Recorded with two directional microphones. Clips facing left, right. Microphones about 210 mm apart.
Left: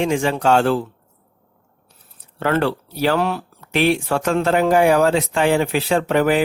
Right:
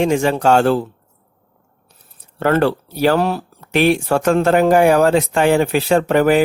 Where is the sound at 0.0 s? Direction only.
40° right (ahead or behind).